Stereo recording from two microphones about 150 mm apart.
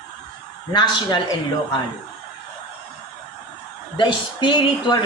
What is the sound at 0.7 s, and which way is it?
Speech, 30° left (ahead or behind).